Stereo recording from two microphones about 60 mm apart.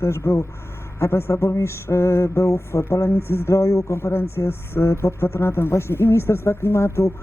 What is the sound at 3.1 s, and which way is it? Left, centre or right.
Speech, left.